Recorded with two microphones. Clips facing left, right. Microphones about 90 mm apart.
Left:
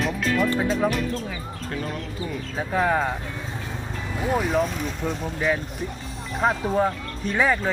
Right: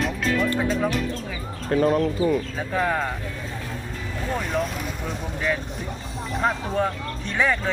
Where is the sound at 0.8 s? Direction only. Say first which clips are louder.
Left 1 dB; 5° left (ahead or behind).